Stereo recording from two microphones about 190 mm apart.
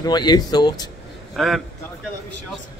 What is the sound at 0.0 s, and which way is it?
Speech, 20° left (ahead or behind).